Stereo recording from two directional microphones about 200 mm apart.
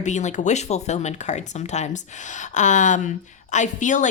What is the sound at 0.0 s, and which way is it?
A woman's voice, 35° left (ahead or behind).